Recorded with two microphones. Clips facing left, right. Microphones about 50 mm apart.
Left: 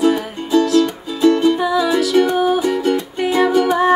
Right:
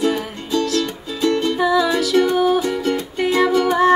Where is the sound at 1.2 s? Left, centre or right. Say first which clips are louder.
Left 4 dB; centre.